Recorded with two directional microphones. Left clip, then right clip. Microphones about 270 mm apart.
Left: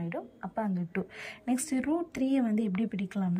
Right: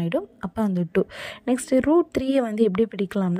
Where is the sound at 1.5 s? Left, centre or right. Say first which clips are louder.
Right 12 dB; right.